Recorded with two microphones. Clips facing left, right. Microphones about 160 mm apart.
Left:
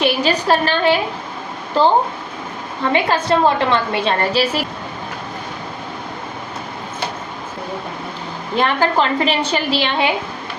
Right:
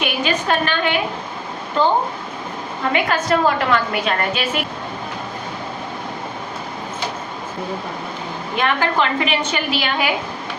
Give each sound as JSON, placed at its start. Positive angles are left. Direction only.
{"t": 0.0, "sound": "a woman's voice", "side_deg": 35}
{"t": 2.9, "sound": "a woman's voice", "side_deg": 30}
{"t": 8.5, "sound": "a woman's voice", "side_deg": 35}